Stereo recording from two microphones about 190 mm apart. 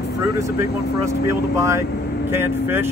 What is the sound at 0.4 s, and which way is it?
Speech, 15° right (ahead or behind).